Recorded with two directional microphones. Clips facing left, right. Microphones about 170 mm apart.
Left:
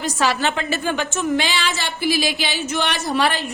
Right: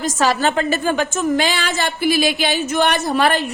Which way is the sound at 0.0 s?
45° right (ahead or behind).